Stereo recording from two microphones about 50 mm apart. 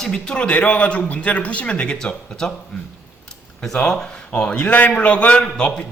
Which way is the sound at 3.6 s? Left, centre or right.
Centre.